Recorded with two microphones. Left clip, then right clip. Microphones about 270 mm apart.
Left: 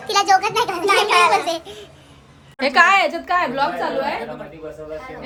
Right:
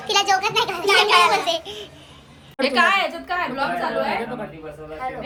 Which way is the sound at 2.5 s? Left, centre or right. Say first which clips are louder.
Left 4 dB; left.